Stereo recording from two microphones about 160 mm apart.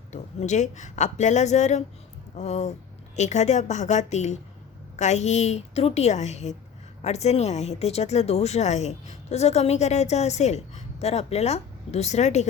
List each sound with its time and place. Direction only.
0.1 s speech: 45° left (ahead or behind)